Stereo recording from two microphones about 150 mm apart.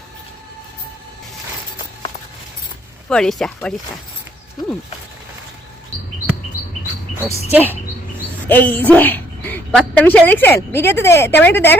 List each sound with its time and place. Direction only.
3.1 s speech: 5° left (ahead or behind)
7.2 s speech: 20° left (ahead or behind)
7.5 s speech: 15° right (ahead or behind)
8.4 s a woman's voice: 10° left (ahead or behind)